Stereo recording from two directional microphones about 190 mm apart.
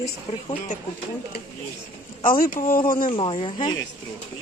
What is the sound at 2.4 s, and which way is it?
Speech, 50° left (ahead or behind).